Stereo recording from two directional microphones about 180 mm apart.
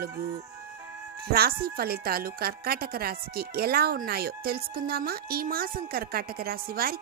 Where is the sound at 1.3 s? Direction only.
60° right (ahead or behind).